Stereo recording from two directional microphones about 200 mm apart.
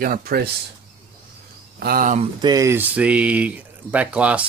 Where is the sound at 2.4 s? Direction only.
15° right (ahead or behind).